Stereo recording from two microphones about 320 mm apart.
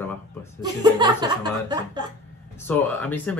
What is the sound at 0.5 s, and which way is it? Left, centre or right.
Speech, centre.